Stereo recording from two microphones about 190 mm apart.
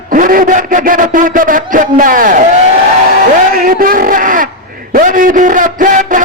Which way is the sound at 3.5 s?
50° right (ahead or behind).